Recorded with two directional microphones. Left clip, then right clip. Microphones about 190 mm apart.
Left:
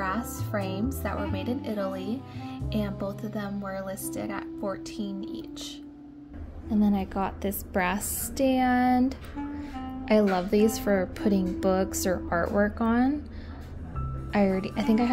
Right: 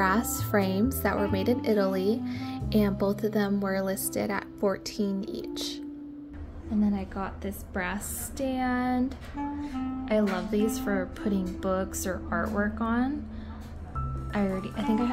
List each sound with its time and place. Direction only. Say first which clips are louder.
0.0 s a woman's voice: right 5 dB; 35° right (ahead or behind)
6.8 s a woman's voice: left 4 dB; 45° left (ahead or behind)
10.0 s a woman's voice: left 5 dB; 30° left (ahead or behind)
14.3 s a woman's voice: left 5 dB; 25° left (ahead or behind)